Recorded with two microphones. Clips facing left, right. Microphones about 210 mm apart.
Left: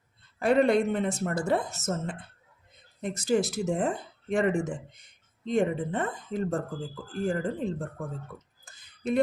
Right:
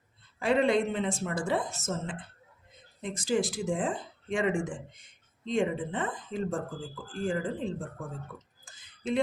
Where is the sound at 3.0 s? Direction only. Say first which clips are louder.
Left 3 dB; 65° left (ahead or behind).